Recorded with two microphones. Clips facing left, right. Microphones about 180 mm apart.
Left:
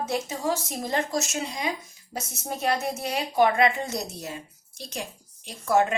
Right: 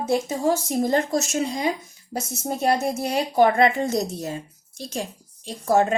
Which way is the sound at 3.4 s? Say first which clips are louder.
Right 3 dB; 45° right (ahead or behind).